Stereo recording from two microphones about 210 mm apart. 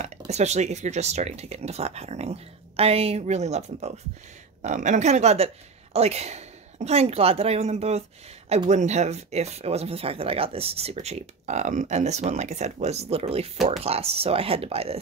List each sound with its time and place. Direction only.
0.3 s a woman's voice: 30° right (ahead or behind)